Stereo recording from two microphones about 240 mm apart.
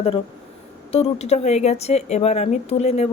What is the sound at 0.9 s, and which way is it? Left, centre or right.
A woman's voice, left.